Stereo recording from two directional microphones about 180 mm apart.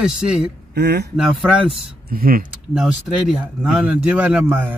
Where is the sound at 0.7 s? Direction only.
65° right (ahead or behind).